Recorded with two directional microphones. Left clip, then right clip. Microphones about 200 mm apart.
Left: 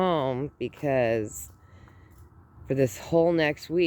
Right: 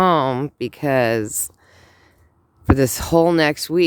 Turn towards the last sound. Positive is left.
turn(degrees=-50)  # may be behind; listen again after turning